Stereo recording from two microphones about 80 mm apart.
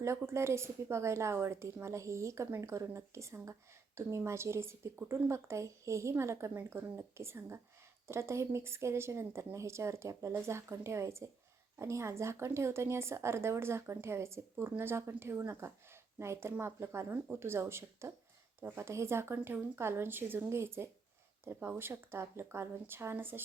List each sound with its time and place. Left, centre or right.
0.2 s speech: right